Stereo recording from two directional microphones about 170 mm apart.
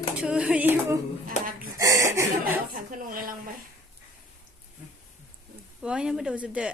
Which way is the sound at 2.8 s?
55° right (ahead or behind).